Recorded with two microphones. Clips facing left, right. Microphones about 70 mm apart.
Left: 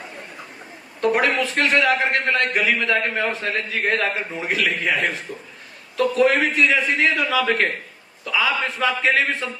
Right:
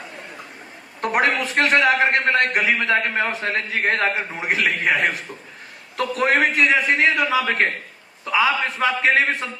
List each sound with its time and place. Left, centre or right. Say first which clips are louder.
1.2 s a man's voice: right 1 dB; right
6.3 s a man's voice: right 1 dB; right